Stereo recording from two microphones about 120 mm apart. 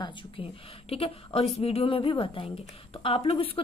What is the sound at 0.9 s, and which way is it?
A woman's voice, 55° left (ahead or behind).